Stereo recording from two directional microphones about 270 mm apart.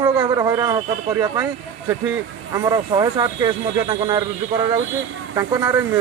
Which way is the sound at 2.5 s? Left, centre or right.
Centre.